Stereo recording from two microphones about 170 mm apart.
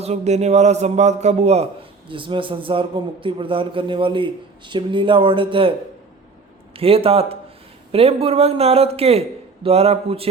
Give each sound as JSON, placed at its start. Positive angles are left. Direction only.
{"t": 0.0, "sound": "a man's voice", "side_deg": -40}
{"t": 6.7, "sound": "a man's voice", "side_deg": -35}